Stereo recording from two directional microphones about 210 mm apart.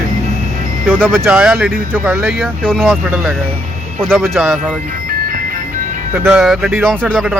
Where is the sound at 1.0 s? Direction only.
5° left (ahead or behind).